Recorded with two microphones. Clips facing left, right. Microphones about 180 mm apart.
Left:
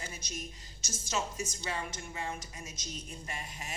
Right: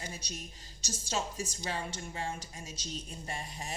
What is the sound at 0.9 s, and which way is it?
A woman's voice, 35° right (ahead or behind).